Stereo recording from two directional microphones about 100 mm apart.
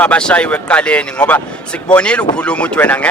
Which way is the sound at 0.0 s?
10° left (ahead or behind).